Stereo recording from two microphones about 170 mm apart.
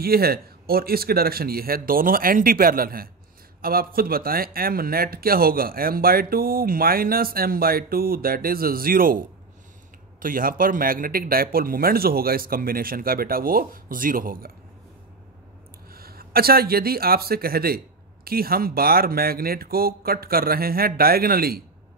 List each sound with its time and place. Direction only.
0.0 s speech: 65° right (ahead or behind)
10.2 s speech: 55° right (ahead or behind)
15.9 s speech: 60° right (ahead or behind)